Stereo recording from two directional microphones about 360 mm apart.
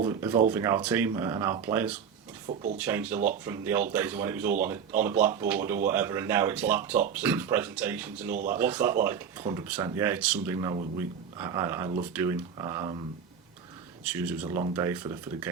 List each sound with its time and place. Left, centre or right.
0.0 s speech: centre
14.0 s speech: centre